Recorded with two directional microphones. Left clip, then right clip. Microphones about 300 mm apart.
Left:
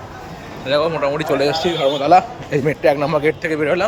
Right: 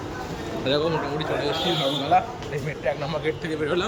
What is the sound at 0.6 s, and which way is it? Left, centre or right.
Speech, centre.